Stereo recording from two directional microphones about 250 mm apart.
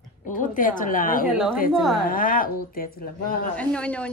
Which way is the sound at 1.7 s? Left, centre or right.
Centre.